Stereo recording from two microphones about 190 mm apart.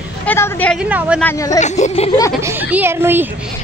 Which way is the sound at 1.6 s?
40° left (ahead or behind).